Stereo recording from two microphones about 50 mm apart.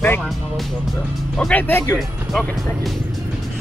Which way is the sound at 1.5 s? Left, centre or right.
Left.